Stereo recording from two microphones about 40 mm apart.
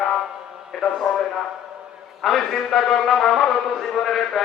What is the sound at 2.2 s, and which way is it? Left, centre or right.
A man's voice, centre.